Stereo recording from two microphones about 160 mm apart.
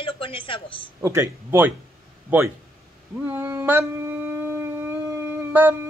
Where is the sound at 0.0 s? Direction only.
35° left (ahead or behind).